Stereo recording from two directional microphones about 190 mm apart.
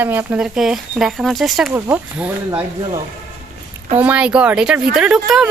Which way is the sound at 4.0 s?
5° right (ahead or behind).